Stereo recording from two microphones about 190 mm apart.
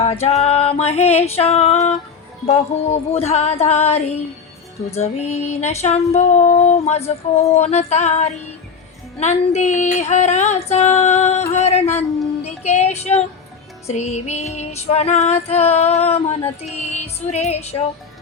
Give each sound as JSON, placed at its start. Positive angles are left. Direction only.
{"t": 0.0, "sound": "music", "side_deg": 35}
{"t": 0.4, "sound": "female singing", "side_deg": 30}
{"t": 16.9, "sound": "music", "side_deg": 35}